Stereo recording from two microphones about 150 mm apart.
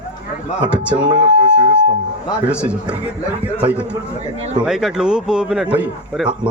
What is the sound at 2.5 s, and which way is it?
A man's voice, 5° right (ahead or behind).